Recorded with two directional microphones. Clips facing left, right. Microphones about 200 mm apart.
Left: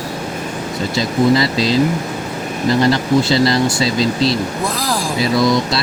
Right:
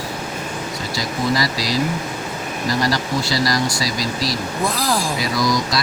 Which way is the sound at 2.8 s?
25° left (ahead or behind).